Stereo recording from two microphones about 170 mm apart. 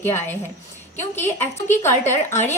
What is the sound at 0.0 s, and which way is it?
A woman's voice, 15° left (ahead or behind).